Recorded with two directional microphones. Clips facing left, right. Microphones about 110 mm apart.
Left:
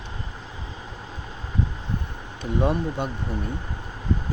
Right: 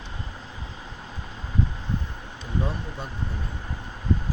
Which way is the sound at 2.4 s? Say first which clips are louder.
Left 7 dB; 70° left (ahead or behind).